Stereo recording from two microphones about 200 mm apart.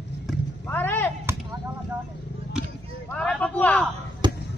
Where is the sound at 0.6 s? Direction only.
10° left (ahead or behind).